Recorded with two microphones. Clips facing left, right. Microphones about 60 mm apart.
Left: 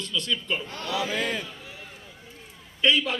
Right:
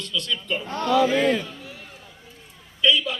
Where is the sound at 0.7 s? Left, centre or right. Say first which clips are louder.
Right 9 dB; right.